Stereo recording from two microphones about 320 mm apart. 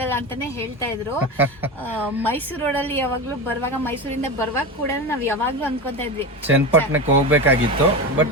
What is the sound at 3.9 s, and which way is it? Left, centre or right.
Speech, centre.